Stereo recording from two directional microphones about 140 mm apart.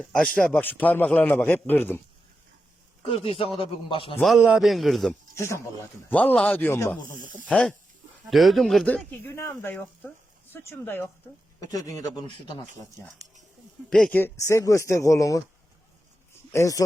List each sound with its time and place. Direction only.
0.0 s a man's voice: 5° left (ahead or behind)
3.0 s speech: 45° left (ahead or behind)
4.4 s a man's voice: 5° right (ahead or behind)
5.3 s speech: 20° left (ahead or behind)
7.4 s a man's voice: 5° left (ahead or behind); by 12.5 s 30° left (ahead or behind)
13.9 s speech: 10° left (ahead or behind)
16.5 s speech: 20° left (ahead or behind)